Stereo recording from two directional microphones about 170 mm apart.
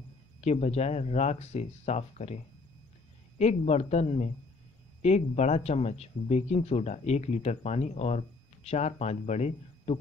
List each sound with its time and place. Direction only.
0.4 s speech: 40° left (ahead or behind)